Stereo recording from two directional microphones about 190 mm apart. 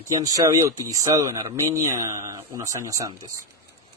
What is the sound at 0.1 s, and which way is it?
Speech, 20° right (ahead or behind).